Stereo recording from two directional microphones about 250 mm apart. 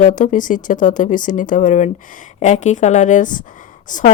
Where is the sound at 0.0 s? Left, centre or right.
Left.